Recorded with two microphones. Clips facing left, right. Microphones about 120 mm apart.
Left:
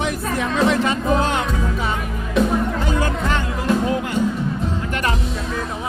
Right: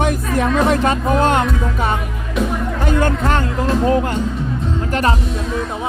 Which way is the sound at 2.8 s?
60° right (ahead or behind).